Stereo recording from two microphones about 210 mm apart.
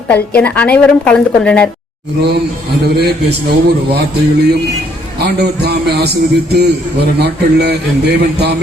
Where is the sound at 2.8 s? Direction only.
50° right (ahead or behind).